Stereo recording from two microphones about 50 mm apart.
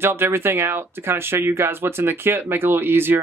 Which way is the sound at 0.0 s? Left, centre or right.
Right.